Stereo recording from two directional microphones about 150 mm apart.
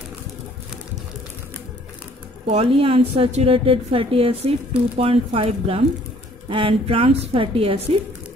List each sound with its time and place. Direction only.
2.5 s a woman's voice: 40° right (ahead or behind)